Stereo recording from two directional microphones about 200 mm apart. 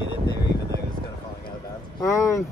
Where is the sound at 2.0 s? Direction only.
15° left (ahead or behind).